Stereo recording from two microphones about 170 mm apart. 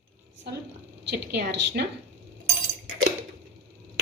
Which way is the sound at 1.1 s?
85° right.